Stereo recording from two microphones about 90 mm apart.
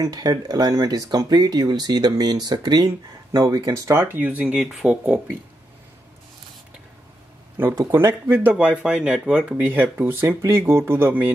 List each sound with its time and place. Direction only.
0.0 s speech: 45° right (ahead or behind)
3.3 s speech: 40° right (ahead or behind); by 5.4 s 15° right (ahead or behind)
7.5 s speech: 25° right (ahead or behind)
10.8 s music: 25° right (ahead or behind)